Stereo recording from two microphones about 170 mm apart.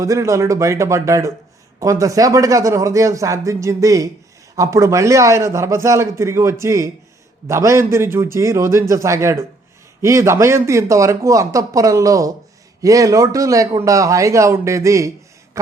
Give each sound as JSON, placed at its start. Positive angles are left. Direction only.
{"t": 0.0, "sound": "a man's voice", "side_deg": -20}